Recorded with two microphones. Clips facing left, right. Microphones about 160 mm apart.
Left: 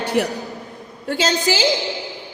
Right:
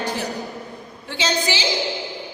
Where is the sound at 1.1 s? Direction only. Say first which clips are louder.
Left 4 dB; 45° left (ahead or behind).